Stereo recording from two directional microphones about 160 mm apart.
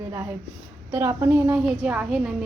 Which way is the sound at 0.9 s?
15° right (ahead or behind).